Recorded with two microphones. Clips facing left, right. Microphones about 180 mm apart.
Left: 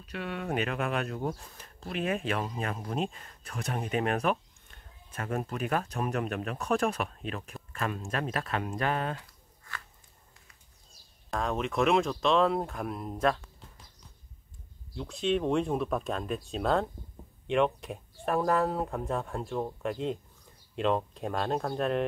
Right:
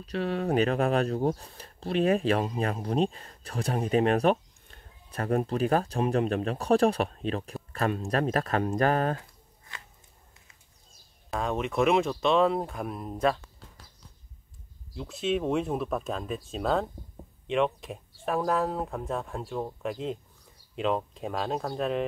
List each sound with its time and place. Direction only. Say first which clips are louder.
0.0 s speech: right 7 dB; 35° right (ahead or behind)
11.2 s speech: right 1 dB; centre (ahead or behind)
15.0 s speech: even; centre (ahead or behind)